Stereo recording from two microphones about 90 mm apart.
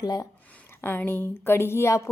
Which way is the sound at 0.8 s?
25° left (ahead or behind).